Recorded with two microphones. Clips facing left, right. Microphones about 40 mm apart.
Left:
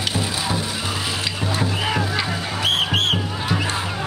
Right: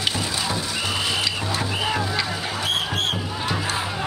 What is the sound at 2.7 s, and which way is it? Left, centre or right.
Music, left.